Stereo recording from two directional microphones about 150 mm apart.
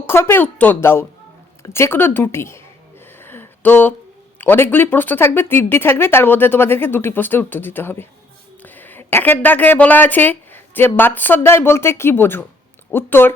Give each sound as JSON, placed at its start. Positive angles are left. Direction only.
{"t": 0.0, "sound": "speech", "side_deg": 15}
{"t": 3.2, "sound": "a sound", "side_deg": 15}
{"t": 4.4, "sound": "speech", "side_deg": 15}